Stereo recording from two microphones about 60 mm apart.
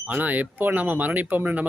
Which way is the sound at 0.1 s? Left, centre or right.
Right.